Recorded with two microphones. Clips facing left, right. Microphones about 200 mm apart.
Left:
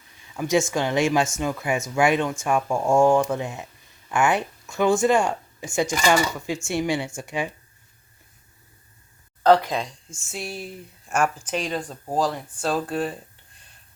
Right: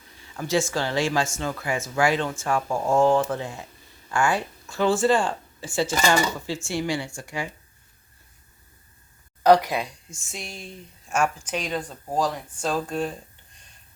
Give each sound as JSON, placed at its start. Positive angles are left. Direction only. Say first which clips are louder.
{"t": 0.3, "sound": "speech", "louder": "left 3 dB", "side_deg": 15}
{"t": 9.4, "sound": "speech", "louder": "even", "side_deg": -15}
{"t": 10.2, "sound": "speech", "louder": "left 5 dB", "side_deg": 5}
{"t": 12.6, "sound": "speech", "louder": "left 1 dB", "side_deg": 5}